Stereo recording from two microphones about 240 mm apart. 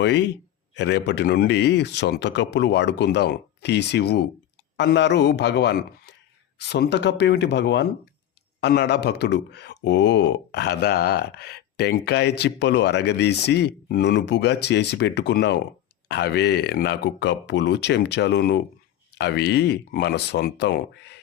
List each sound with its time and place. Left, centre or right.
0.0 s speech: left